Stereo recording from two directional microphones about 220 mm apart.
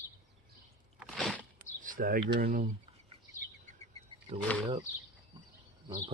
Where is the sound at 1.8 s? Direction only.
40° right (ahead or behind).